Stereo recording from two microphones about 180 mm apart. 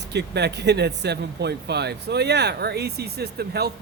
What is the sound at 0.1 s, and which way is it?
Speech, 70° right (ahead or behind).